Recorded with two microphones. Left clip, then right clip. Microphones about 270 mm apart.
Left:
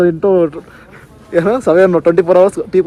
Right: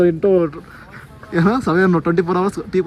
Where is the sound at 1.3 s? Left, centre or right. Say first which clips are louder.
Left 7 dB; centre.